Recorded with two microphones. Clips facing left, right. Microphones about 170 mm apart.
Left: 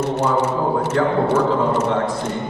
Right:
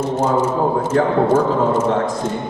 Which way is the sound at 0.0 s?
70° left (ahead or behind).